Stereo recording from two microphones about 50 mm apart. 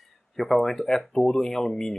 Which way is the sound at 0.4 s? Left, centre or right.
Centre.